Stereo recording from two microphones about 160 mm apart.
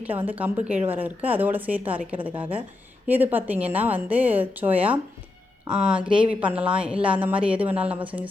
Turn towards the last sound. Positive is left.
turn(degrees=-10)  # may be behind; listen again after turning